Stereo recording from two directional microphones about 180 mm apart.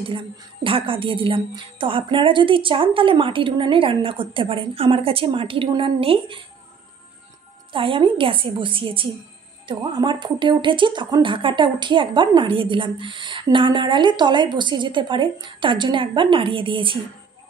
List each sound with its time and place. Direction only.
0.7 s speech: 30° right (ahead or behind)
7.7 s speech: 30° right (ahead or behind)